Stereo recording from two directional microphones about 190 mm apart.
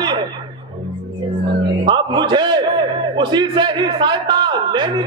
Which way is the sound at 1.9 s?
25° right (ahead or behind).